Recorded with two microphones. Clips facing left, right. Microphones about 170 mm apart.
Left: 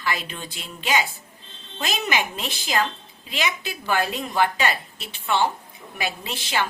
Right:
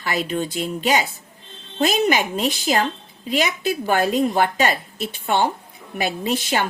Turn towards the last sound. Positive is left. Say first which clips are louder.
# right 5 dB
turn(degrees=-40)  # may be behind; listen again after turning